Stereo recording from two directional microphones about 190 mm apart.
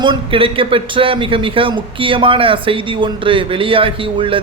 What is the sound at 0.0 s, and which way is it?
A man's voice, 25° right (ahead or behind).